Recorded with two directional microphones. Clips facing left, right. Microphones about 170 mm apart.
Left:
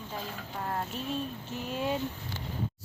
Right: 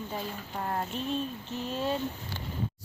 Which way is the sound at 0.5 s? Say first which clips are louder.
Right 2 dB; centre (ahead or behind).